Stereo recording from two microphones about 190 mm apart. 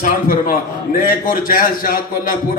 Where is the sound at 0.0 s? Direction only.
50° left (ahead or behind).